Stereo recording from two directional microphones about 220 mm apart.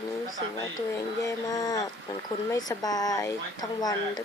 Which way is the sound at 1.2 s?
15° left (ahead or behind).